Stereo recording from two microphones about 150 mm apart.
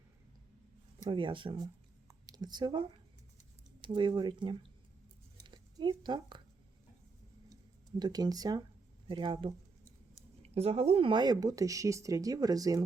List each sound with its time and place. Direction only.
1.0 s speech: 35° right (ahead or behind)
5.4 s a sound: 30° right (ahead or behind)
7.5 s speech: 25° right (ahead or behind)